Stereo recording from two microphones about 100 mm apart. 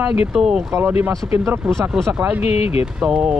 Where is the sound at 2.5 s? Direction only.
85° left.